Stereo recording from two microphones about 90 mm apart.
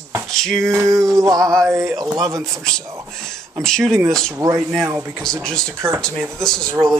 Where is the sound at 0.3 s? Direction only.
5° left (ahead or behind).